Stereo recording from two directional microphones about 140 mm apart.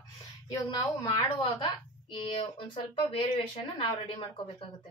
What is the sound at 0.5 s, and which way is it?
Speech, 25° left (ahead or behind).